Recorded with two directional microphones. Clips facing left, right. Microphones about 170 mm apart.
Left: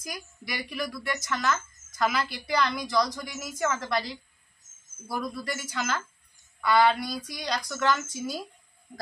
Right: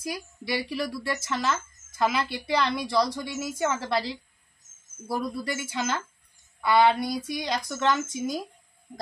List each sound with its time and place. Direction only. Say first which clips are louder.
0.0 s speech: right 6 dB; 30° right (ahead or behind)